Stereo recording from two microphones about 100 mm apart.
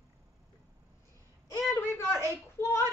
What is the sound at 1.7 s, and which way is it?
Speech, 25° left (ahead or behind).